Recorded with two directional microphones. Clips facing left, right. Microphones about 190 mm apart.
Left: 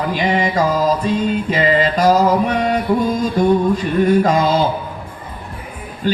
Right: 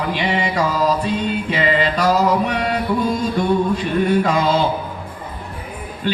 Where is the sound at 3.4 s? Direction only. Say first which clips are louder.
Left 5 dB; 40° left (ahead or behind).